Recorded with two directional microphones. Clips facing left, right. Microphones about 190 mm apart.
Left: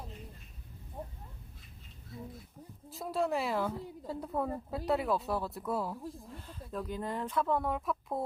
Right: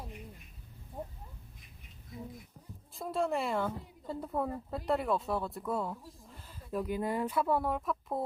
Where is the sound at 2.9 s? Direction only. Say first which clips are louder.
Even; centre (ahead or behind).